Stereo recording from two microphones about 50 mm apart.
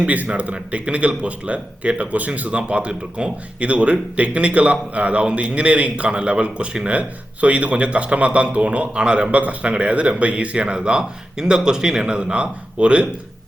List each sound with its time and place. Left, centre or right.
0.0 s a man's voice: right